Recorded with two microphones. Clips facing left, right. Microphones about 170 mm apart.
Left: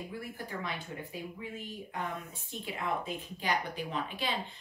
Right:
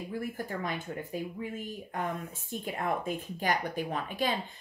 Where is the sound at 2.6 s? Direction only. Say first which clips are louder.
Right 3 dB; 50° right (ahead or behind).